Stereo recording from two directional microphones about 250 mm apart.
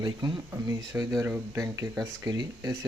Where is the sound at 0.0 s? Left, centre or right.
Centre.